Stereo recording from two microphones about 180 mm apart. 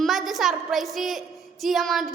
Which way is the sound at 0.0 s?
Centre (ahead or behind).